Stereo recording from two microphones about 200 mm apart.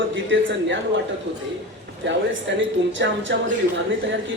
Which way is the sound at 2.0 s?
65° right (ahead or behind).